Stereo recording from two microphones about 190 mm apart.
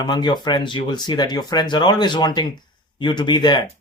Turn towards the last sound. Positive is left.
turn(degrees=25)  # may be behind; listen again after turning